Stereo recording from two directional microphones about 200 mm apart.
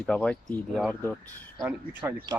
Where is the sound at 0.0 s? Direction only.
5° left (ahead or behind).